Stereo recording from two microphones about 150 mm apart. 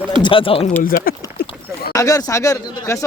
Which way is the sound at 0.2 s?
35° left (ahead or behind).